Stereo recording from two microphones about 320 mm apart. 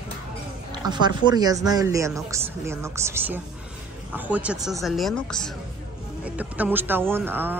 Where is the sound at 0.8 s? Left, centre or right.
Centre.